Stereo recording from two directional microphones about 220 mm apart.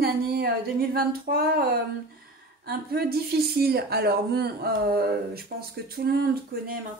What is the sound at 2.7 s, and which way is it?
Speech, 45° right (ahead or behind).